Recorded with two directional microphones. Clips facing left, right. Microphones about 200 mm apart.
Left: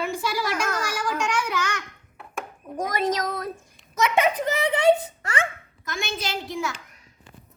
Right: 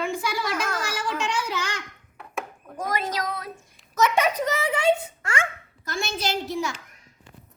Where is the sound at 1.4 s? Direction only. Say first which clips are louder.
Left 2 dB; 25° right (ahead or behind).